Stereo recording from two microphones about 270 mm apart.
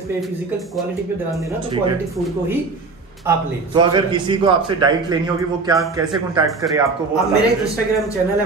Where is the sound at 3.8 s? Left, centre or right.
Centre.